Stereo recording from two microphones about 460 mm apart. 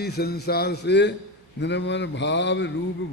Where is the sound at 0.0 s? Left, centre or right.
Left.